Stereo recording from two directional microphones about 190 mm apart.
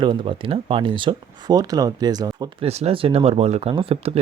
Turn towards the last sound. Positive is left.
turn(degrees=-30)  # may be behind; listen again after turning